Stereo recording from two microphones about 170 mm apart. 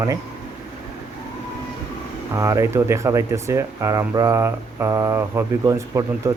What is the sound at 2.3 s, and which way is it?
Speech, 20° right (ahead or behind).